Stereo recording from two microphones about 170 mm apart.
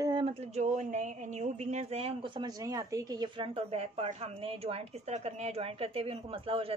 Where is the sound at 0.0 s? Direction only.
30° right (ahead or behind).